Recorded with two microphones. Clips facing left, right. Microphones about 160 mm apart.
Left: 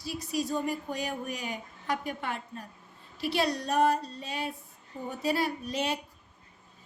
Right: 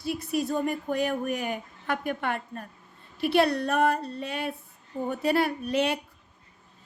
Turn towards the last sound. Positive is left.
turn(degrees=-60)  # may be behind; listen again after turning